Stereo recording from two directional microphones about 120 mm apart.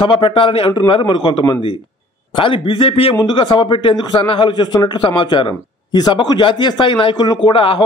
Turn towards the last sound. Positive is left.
turn(degrees=45)  # may be behind; listen again after turning